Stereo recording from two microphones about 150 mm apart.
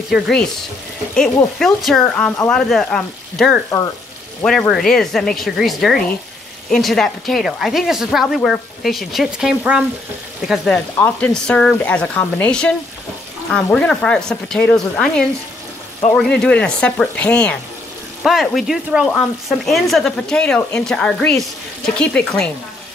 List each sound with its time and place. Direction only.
0.1 s a woman's voice: 5° left (ahead or behind)
11.0 s frying: 10° left (ahead or behind)
18.2 s a woman's voice: centre (ahead or behind)